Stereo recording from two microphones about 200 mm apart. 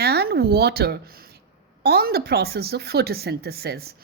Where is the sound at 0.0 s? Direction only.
50° right (ahead or behind).